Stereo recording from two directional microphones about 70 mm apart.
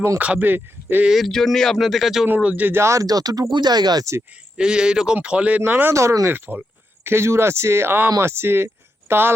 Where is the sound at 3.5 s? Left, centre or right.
Right.